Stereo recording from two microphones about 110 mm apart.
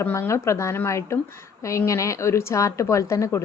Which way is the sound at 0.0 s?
25° left (ahead or behind).